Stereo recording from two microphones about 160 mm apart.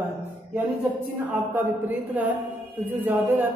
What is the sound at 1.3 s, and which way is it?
A woman's voice, 10° right (ahead or behind).